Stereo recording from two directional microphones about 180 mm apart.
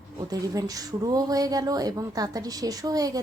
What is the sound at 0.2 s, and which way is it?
Speech, 20° right (ahead or behind).